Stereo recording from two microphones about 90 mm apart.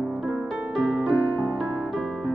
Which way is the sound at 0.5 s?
5° right (ahead or behind).